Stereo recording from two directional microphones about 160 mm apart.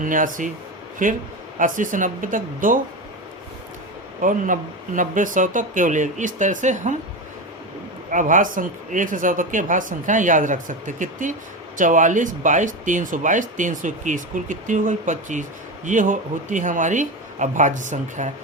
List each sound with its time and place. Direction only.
0.0 s speech: 55° right (ahead or behind)
4.2 s speech: 55° right (ahead or behind)
8.1 s speech: 55° right (ahead or behind)